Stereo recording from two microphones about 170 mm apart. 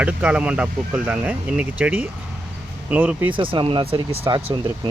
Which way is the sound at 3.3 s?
30° right (ahead or behind).